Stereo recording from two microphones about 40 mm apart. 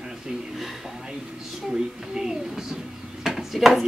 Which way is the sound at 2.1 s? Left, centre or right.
Centre.